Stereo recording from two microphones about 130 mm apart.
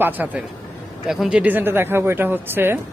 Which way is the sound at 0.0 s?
15° right (ahead or behind).